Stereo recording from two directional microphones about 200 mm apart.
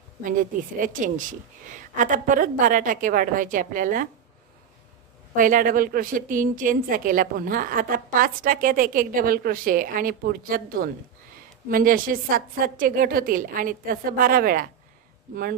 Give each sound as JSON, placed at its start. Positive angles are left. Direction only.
{"t": 0.2, "sound": "a woman's voice", "side_deg": -40}
{"t": 5.3, "sound": "a woman's voice", "side_deg": -45}